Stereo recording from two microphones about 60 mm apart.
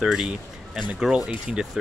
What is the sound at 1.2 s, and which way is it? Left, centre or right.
Speech, centre.